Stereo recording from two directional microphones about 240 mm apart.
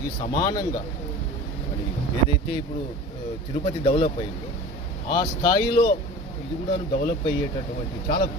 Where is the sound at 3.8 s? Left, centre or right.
Left.